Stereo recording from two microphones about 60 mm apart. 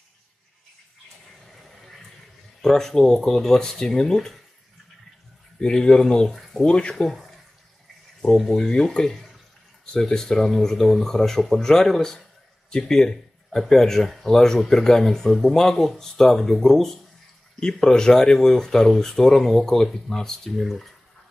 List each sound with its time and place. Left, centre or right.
1.4 s a sound: centre
2.6 s speech: centre
5.6 s speech: centre
6.7 s speech: centre
7.0 s speech: centre